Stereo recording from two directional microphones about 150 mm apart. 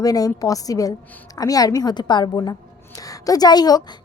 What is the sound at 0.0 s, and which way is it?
A woman's voice, 25° left (ahead or behind).